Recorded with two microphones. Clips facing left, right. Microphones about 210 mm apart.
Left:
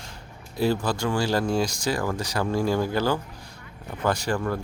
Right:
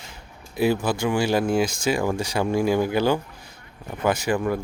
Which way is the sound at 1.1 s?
20° right (ahead or behind).